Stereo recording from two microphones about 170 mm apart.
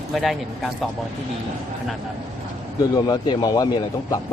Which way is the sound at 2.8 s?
25° left (ahead or behind).